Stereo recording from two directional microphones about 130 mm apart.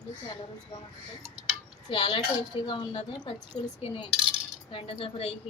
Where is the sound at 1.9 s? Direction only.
40° left (ahead or behind).